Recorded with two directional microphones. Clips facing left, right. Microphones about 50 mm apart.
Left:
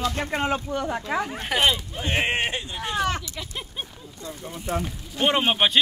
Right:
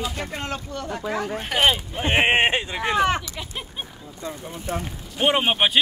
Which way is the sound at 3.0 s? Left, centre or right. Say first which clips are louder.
Right 4 dB; right.